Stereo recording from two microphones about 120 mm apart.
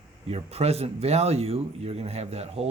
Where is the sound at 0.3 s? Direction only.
60° right (ahead or behind).